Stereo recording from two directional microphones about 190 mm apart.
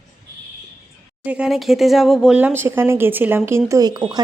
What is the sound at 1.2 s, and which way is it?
Speech, 5° right (ahead or behind).